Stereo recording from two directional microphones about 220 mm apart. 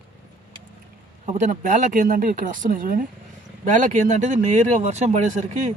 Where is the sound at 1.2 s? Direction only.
35° right (ahead or behind).